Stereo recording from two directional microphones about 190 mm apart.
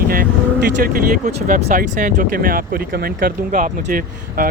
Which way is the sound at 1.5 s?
40° right (ahead or behind).